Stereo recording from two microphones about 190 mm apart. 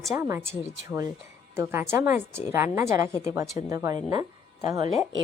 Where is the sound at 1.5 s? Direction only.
15° right (ahead or behind).